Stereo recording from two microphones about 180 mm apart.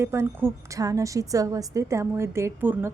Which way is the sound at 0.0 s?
15° right (ahead or behind).